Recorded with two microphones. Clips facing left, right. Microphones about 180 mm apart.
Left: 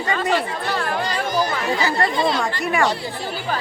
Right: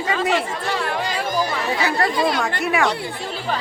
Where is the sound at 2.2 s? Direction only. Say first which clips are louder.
Even; 25° left (ahead or behind).